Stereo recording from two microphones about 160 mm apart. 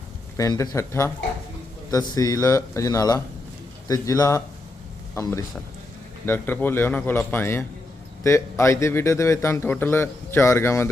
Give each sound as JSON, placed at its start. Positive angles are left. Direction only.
{"t": 0.3, "sound": "a man's voice", "side_deg": 20}